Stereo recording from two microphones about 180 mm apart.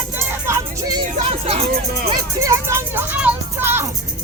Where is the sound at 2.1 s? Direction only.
15° right (ahead or behind).